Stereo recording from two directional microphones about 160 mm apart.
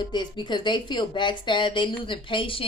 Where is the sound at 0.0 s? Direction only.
30° left (ahead or behind).